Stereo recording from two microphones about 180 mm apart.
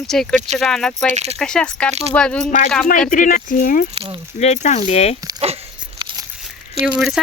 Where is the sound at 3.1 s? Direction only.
45° left (ahead or behind).